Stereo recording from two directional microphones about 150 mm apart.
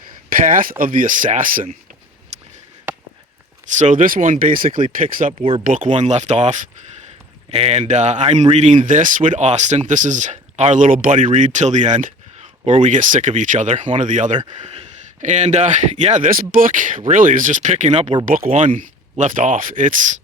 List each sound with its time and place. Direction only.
0.3 s speech: 65° right (ahead or behind)
2.3 s a sound: 45° right (ahead or behind)
3.8 s speech: 60° right (ahead or behind)
5.4 s speech: 40° right (ahead or behind)
5.6 s speech: 60° right (ahead or behind)
8.9 s speech: 60° right (ahead or behind)
18.3 s speech: 65° right (ahead or behind)